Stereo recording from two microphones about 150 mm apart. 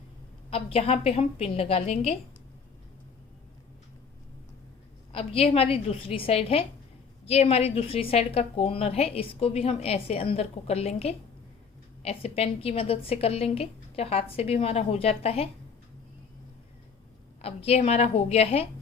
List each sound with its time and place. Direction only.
0.5 s a woman's voice: 40° left (ahead or behind)
5.1 s a woman's voice: 40° left (ahead or behind)
17.4 s a woman's voice: 40° left (ahead or behind)